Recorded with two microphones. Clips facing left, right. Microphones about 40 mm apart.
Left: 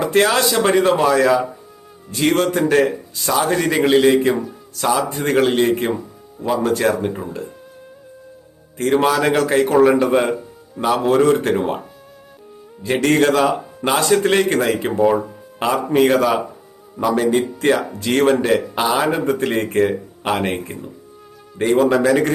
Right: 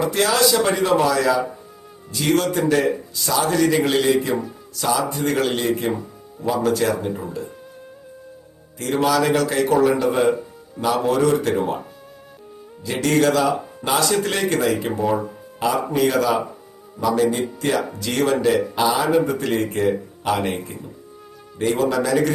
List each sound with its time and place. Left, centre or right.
0.0 s speech: left
8.8 s speech: left
12.8 s speech: left